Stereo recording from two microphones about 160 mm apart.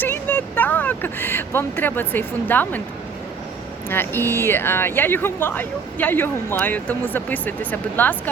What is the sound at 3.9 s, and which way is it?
Speech, 15° left (ahead or behind).